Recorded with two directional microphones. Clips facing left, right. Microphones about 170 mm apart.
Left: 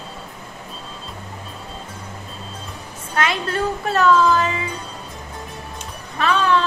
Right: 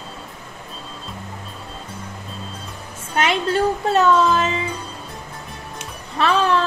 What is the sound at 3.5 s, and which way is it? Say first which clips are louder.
Speech: right 3 dB; 25° right (ahead or behind).